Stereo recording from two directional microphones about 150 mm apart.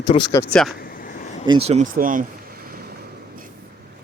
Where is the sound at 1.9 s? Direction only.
65° right (ahead or behind); by 3.5 s 90° right.